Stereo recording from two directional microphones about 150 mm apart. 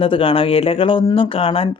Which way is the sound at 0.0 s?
35° left (ahead or behind).